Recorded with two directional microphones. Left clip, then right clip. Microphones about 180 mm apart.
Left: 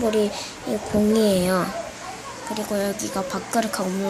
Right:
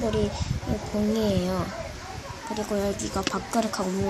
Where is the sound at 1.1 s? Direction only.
20° left (ahead or behind).